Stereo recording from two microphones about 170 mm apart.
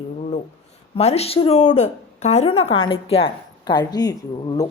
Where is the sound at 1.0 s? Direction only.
40° left (ahead or behind); by 4.6 s 20° left (ahead or behind).